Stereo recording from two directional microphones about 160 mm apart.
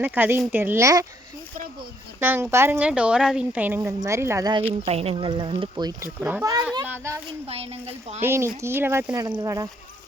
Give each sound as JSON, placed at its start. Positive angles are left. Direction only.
{"t": 0.0, "sound": "a woman's voice", "side_deg": -10}
{"t": 2.2, "sound": "a woman's voice", "side_deg": -15}
{"t": 4.9, "sound": "a woman's voice", "side_deg": -40}
{"t": 6.1, "sound": "a woman's voice", "side_deg": -10}
{"t": 6.4, "sound": "a woman's voice", "side_deg": -25}
{"t": 7.4, "sound": "a woman's voice", "side_deg": -40}
{"t": 8.2, "sound": "a woman's voice", "side_deg": -15}